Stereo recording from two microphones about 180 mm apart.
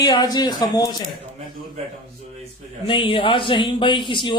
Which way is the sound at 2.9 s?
30° left (ahead or behind).